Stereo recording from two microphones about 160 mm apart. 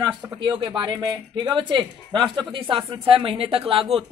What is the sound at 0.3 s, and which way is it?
A man's voice, 30° right (ahead or behind).